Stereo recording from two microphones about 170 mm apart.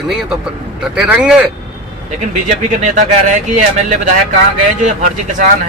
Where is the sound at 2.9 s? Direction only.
45° right (ahead or behind).